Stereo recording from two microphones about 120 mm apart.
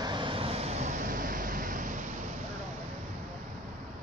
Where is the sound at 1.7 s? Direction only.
90° right.